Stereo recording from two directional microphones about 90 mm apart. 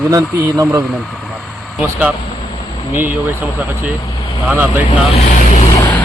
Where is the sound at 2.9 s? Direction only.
20° right (ahead or behind).